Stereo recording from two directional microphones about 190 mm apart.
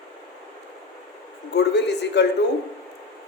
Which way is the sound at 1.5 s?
65° left (ahead or behind).